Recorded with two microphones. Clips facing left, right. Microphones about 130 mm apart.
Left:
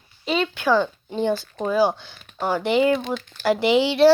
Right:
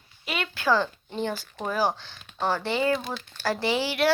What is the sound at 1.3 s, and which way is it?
Speech, 10° right (ahead or behind).